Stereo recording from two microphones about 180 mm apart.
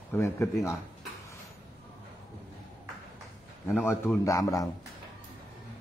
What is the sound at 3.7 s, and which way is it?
Speech, 10° left (ahead or behind).